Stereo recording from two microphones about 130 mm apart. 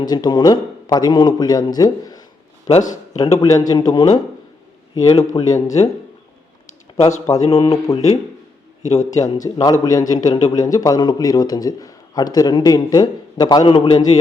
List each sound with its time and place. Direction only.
0.0 s a man's voice: 30° left (ahead or behind)
7.3 s a man's voice: 25° left (ahead or behind)
9.0 s a man's voice: 25° left (ahead or behind)